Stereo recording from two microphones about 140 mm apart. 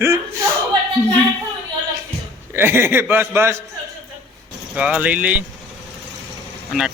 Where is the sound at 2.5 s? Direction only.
15° right (ahead or behind).